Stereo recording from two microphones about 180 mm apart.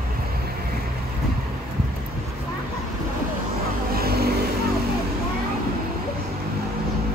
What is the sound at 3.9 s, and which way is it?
Vehicle, 60° right (ahead or behind).